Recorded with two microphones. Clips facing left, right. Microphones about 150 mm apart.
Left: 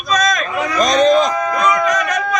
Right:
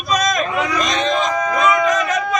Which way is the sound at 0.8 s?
40° left (ahead or behind).